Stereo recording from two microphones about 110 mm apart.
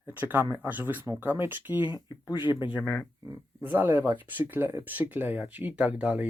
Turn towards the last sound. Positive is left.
turn(degrees=-10)  # may be behind; listen again after turning